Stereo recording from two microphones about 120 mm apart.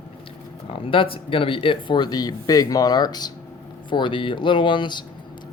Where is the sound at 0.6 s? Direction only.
50° left (ahead or behind).